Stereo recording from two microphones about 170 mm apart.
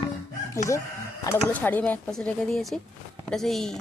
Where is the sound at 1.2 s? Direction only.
15° left (ahead or behind).